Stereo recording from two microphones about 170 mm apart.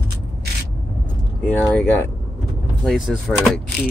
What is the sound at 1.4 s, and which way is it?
Speech, 10° left (ahead or behind).